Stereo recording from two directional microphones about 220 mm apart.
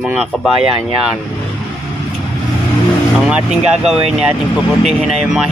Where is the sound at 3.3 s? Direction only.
5° right (ahead or behind).